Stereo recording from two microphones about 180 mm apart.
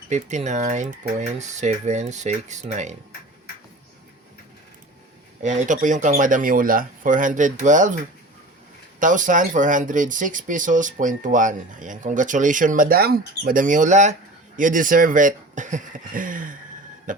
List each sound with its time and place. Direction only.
0.1 s speech: 40° right (ahead or behind)
5.4 s speech: 40° right (ahead or behind)
17.1 s a sound: 50° right (ahead or behind)